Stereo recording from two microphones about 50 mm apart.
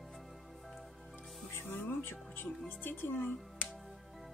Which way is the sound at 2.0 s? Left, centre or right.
Left.